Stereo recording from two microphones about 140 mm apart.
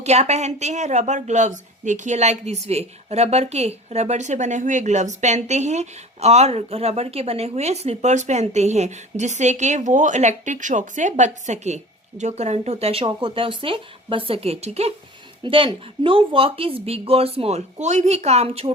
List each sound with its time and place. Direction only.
0.0 s a woman's voice: 50° right (ahead or behind)